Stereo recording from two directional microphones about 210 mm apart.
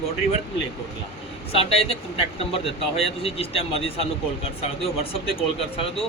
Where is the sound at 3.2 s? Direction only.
25° left (ahead or behind).